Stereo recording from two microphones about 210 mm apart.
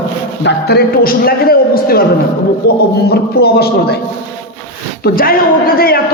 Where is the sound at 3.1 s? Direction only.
50° left (ahead or behind).